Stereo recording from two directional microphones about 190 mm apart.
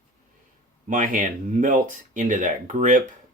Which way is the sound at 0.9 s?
45° right (ahead or behind).